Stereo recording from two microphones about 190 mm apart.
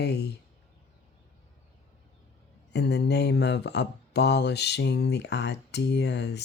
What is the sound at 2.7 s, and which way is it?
Speech, 65° left (ahead or behind).